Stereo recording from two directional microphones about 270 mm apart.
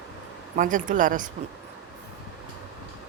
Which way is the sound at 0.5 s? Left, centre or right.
Right.